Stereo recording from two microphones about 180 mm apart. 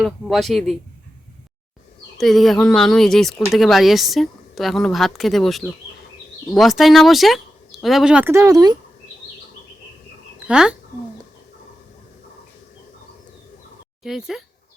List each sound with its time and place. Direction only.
0.0 s speech: centre (ahead or behind)
2.1 s speech: centre (ahead or behind); by 8.8 s 20° right (ahead or behind)
10.4 s speech: 5° right (ahead or behind)
14.0 s speech: centre (ahead or behind)